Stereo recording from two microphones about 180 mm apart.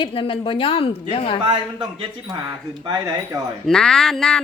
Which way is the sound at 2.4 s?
20° right (ahead or behind).